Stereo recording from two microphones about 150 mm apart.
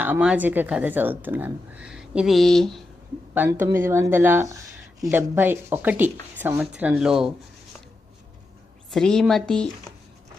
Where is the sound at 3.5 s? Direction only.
20° right (ahead or behind); by 7.3 s 5° right (ahead or behind).